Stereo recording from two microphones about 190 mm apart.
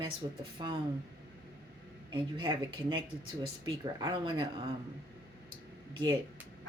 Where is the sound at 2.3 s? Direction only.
25° right (ahead or behind).